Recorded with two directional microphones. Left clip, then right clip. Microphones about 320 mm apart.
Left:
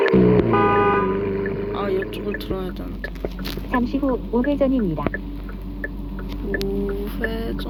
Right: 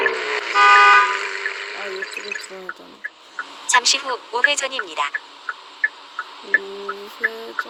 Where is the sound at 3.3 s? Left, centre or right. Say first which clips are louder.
Right 9 dB; right.